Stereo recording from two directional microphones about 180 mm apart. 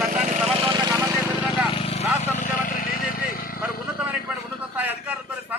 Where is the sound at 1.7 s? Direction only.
35° left (ahead or behind); by 3.4 s 55° left (ahead or behind).